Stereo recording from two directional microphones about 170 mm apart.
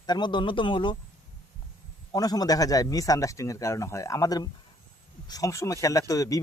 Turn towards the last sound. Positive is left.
turn(degrees=20)  # may be behind; listen again after turning